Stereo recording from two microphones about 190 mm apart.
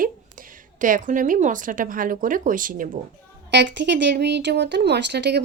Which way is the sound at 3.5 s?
65° right (ahead or behind).